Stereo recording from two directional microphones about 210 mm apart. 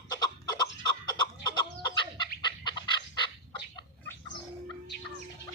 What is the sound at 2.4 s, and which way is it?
Bird, 20° left (ahead or behind).